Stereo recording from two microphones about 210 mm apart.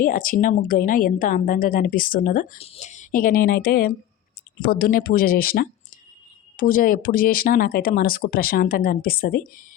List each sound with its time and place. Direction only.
0.0 s a woman's voice: 40° left (ahead or behind)